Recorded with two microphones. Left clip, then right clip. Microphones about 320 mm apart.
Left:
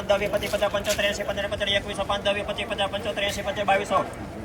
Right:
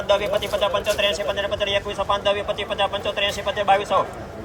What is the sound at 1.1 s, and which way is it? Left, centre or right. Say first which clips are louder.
A man's voice: right 4 dB; centre.